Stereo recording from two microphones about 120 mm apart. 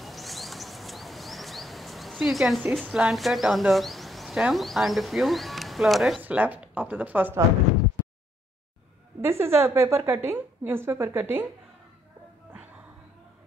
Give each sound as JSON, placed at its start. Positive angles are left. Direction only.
{"t": 0.0, "sound": "a sound", "side_deg": 0}
{"t": 2.9, "sound": "speech", "side_deg": -5}
{"t": 6.2, "sound": "speech", "side_deg": -15}
{"t": 9.2, "sound": "a woman's voice", "side_deg": -20}